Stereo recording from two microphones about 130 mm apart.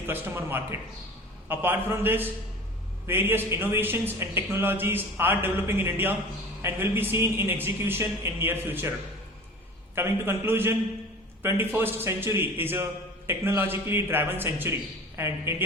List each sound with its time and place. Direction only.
0.1 s a man's voice: 15° right (ahead or behind)
9.9 s a man's voice: 15° right (ahead or behind)